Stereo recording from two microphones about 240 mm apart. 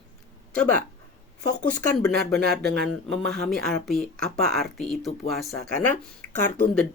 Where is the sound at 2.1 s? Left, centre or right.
Right.